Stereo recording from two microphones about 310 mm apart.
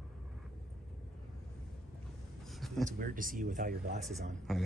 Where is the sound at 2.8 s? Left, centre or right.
Right.